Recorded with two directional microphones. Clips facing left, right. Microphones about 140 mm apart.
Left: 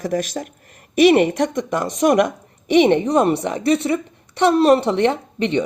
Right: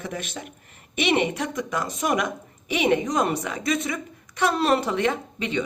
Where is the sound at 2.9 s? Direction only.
30° left (ahead or behind).